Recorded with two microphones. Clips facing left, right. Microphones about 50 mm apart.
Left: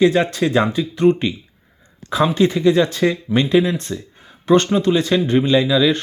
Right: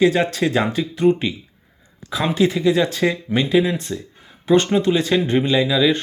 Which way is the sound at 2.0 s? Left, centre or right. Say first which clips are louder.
Left 5 dB; centre.